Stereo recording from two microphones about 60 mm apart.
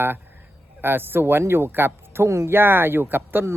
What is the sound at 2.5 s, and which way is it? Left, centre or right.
Speech, right.